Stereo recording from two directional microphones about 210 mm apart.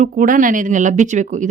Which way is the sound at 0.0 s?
40° right (ahead or behind).